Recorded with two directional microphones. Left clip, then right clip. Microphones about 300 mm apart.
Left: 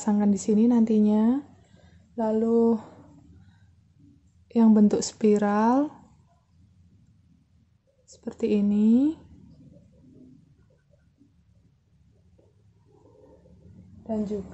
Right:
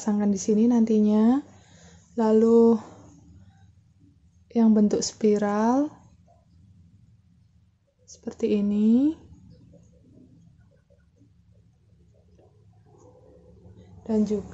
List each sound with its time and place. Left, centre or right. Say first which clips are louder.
0.0 s speech: left 1 dB; centre
2.1 s speech: right 5 dB; centre
4.5 s speech: left 1 dB; centre
8.2 s speech: even; centre